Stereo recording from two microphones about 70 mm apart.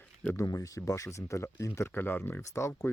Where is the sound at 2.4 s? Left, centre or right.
Left.